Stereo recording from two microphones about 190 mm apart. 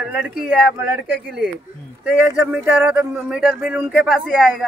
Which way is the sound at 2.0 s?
5° right (ahead or behind).